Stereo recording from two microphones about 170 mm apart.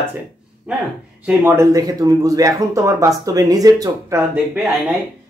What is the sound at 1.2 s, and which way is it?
Speech, 15° right (ahead or behind).